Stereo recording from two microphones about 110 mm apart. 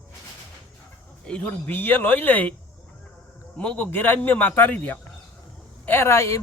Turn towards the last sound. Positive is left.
turn(degrees=25)  # may be behind; listen again after turning